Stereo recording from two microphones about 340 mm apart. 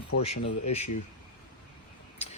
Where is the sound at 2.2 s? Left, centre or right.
Centre.